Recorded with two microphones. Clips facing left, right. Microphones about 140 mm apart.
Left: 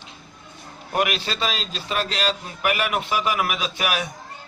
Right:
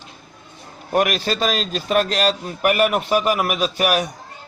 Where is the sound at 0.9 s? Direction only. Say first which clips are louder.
Right 5 dB; 45° right (ahead or behind).